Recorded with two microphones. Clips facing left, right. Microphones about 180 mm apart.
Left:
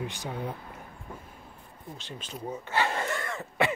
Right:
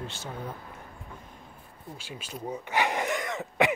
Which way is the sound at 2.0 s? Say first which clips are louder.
Right 1 dB; 10° right (ahead or behind).